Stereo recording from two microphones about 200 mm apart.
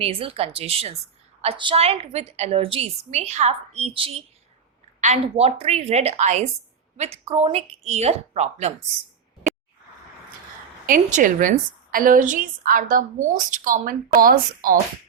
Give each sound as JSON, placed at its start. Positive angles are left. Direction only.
{"t": 0.0, "sound": "a woman's voice", "side_deg": -30}
{"t": 10.8, "sound": "a woman's voice", "side_deg": -40}